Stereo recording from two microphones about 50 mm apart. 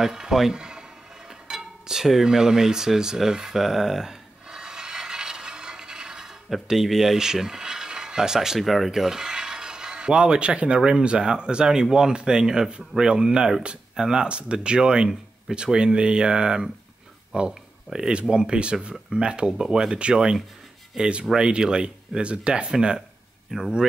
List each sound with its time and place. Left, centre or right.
0.0 s speech: centre
1.5 s music: centre
10.8 s speech: centre